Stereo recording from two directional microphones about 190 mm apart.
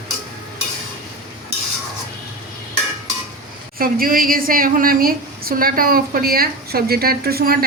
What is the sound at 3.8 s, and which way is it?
A woman's voice, 50° right (ahead or behind).